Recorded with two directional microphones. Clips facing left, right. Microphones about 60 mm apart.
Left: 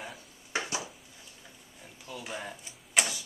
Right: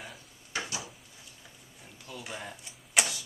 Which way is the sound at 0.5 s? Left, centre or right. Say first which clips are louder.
Left 2 dB; left.